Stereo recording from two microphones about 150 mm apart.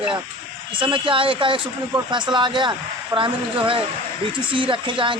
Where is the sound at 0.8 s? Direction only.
35° right (ahead or behind).